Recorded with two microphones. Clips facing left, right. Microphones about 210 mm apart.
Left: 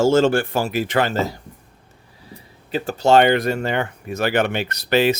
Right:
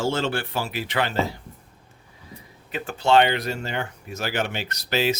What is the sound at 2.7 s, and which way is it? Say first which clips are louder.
Speech: left 4 dB; 40° left (ahead or behind).